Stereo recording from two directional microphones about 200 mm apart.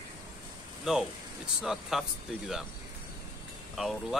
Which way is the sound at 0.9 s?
Centre (ahead or behind).